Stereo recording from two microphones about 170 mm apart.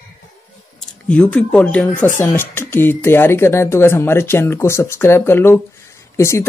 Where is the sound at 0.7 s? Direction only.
5° left (ahead or behind).